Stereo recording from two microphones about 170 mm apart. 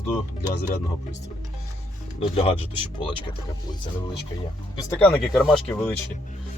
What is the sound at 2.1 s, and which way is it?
Speech, 35° left (ahead or behind).